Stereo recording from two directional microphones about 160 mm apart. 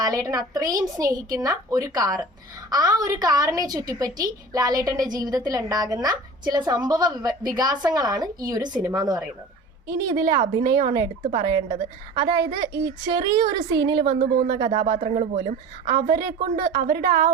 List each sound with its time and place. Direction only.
0.0 s a woman's voice: 20° right (ahead or behind)
10.3 s a woman's voice: 55° right (ahead or behind)
12.1 s a woman's voice: 25° right (ahead or behind)
14.2 s speech: 75° right (ahead or behind)
14.4 s a woman's voice: 30° right (ahead or behind)
15.2 s speech: 50° right (ahead or behind)
15.9 s a woman's voice: 25° right (ahead or behind)
16.7 s a woman's voice: 60° right (ahead or behind)